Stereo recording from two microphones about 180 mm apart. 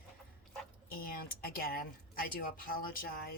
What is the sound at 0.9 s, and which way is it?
Speech, 55° left (ahead or behind).